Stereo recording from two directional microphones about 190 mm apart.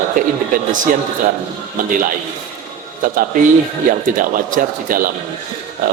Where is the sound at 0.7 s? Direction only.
45° right (ahead or behind).